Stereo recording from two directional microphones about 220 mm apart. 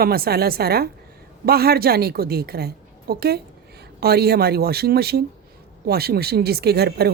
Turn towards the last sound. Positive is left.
turn(degrees=-45)  # may be behind; listen again after turning